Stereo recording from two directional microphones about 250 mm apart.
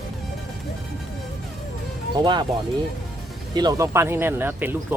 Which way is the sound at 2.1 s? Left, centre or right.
Centre.